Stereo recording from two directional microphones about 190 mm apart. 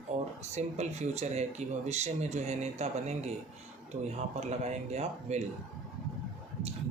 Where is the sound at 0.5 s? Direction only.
35° right (ahead or behind).